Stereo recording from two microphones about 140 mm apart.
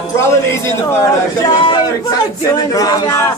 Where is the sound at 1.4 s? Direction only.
35° left (ahead or behind).